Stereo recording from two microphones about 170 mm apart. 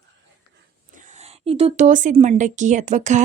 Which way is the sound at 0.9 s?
45° right (ahead or behind).